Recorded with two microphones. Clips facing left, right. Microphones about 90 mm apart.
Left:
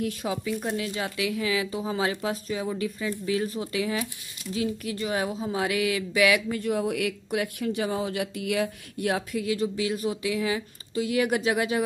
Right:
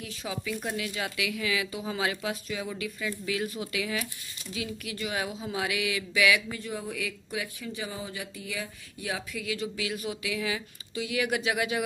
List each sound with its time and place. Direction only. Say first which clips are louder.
0.0 s speech: left 8 dB; 45° left (ahead or behind)
0.7 s speech: left 3 dB; 30° left (ahead or behind)